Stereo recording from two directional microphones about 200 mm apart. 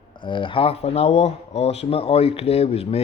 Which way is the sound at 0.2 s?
25° left (ahead or behind).